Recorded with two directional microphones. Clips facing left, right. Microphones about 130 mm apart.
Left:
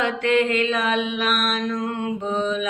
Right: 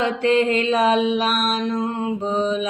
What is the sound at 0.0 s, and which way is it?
Mantra, 35° right (ahead or behind).